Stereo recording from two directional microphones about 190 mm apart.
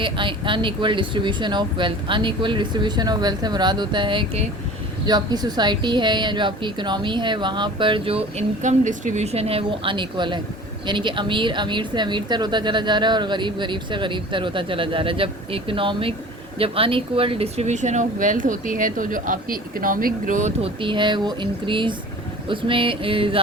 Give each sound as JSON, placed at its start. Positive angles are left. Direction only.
{"t": 0.0, "sound": "speech", "side_deg": -25}
{"t": 20.8, "sound": "speech", "side_deg": -25}